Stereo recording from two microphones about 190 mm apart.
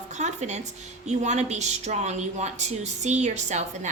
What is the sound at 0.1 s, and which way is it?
A woman's voice, 40° right (ahead or behind).